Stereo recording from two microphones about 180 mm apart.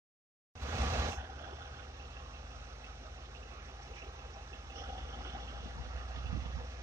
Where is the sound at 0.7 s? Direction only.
15° right (ahead or behind).